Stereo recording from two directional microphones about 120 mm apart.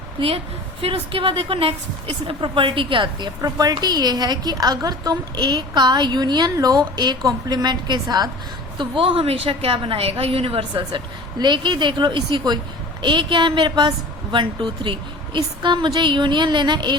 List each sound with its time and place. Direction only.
0.8 s a woman's voice: 55° right (ahead or behind)
3.4 s a woman's voice: 30° right (ahead or behind)
8.8 s a woman's voice: 45° right (ahead or behind)